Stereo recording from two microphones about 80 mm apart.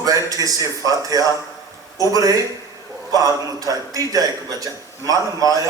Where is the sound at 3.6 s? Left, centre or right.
Right.